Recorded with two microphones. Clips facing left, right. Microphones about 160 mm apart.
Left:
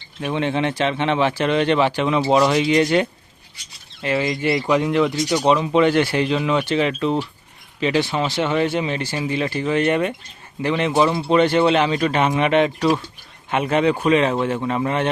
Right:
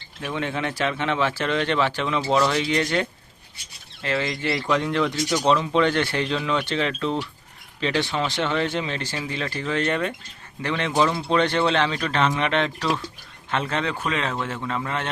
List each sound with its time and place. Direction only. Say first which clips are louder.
0.2 s speech: left 6 dB; 20° left (ahead or behind)